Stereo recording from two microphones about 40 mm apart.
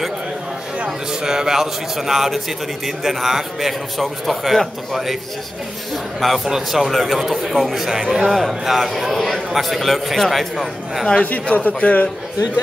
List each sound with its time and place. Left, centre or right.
0.8 s a man's voice: centre
6.2 s a man's voice: centre
11.5 s a man's voice: left